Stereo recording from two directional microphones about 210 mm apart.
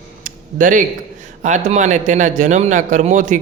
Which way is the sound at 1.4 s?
35° right (ahead or behind).